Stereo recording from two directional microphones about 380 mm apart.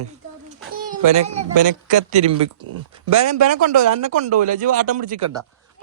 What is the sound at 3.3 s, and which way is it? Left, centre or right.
Speech, right.